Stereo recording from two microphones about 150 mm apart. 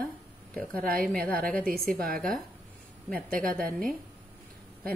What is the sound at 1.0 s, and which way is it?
Speech, 10° left (ahead or behind).